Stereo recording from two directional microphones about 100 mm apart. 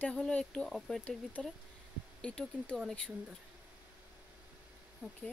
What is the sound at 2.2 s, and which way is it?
Speech, 10° left (ahead or behind).